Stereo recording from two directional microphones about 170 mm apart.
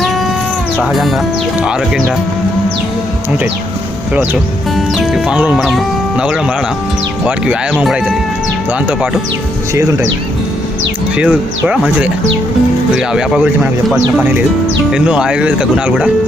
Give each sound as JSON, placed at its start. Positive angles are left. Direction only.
{"t": 4.9, "sound": "speech", "side_deg": -5}
{"t": 11.2, "sound": "speech", "side_deg": -5}
{"t": 13.0, "sound": "speech", "side_deg": -5}